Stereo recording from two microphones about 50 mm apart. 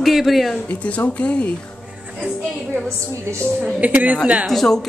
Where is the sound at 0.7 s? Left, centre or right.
Left.